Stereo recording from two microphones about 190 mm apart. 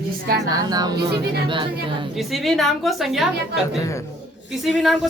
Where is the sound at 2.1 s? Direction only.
Centre (ahead or behind).